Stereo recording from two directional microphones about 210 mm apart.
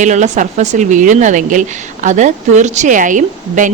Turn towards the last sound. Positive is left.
turn(degrees=-40)  # may be behind; listen again after turning